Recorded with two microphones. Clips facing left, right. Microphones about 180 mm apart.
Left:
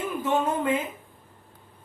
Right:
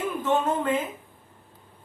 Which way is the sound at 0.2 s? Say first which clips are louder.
Even; 10° left (ahead or behind).